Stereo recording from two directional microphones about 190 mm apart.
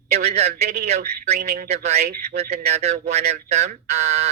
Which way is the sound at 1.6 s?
35° right (ahead or behind).